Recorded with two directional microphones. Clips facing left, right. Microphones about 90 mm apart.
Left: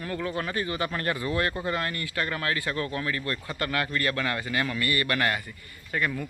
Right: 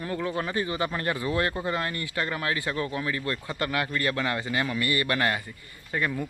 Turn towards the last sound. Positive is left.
turn(degrees=-25)  # may be behind; listen again after turning